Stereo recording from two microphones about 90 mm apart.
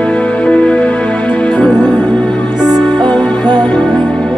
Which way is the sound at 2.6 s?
50° right (ahead or behind).